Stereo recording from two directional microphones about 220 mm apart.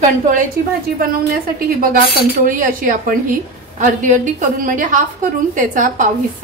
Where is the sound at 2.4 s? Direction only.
40° right (ahead or behind).